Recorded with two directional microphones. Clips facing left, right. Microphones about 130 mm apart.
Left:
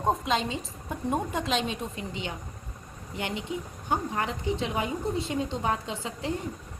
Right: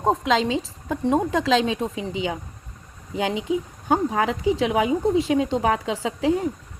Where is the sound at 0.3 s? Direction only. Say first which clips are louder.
Right 7 dB; 90° right.